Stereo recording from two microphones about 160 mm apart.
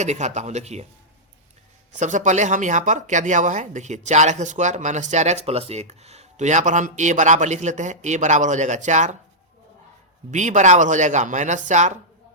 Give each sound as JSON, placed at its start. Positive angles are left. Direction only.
{"t": 0.0, "sound": "speech", "side_deg": -45}
{"t": 2.0, "sound": "speech", "side_deg": -50}
{"t": 10.3, "sound": "speech", "side_deg": -50}